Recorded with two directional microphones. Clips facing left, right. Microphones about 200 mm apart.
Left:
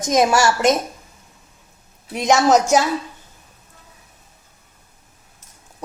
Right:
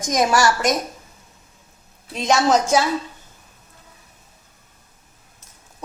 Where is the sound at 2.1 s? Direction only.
15° left (ahead or behind).